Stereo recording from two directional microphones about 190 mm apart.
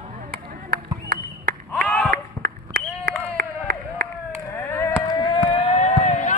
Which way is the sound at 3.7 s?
50° right (ahead or behind).